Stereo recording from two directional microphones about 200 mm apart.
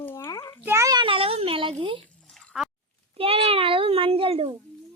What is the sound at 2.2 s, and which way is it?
Drip, 5° left (ahead or behind).